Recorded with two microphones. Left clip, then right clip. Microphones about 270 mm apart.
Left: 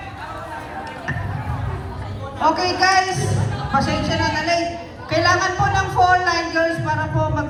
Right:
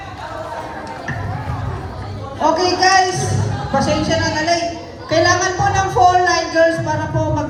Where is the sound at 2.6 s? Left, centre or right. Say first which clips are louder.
Right 6 dB; left.